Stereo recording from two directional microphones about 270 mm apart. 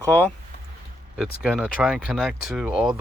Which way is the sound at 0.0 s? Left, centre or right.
Centre.